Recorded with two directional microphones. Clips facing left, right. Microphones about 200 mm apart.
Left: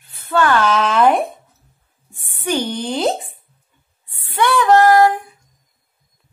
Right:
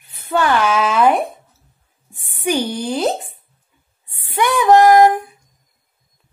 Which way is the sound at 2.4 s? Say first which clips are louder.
Right 1 dB; 10° right (ahead or behind).